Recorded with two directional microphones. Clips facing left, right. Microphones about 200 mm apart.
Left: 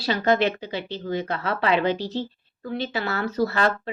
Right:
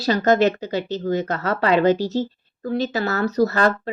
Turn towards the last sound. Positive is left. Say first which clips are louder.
# right 4 dB
turn(degrees=-40)  # may be behind; listen again after turning